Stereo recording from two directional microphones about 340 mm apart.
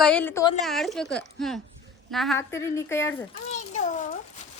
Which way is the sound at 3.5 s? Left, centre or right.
Left.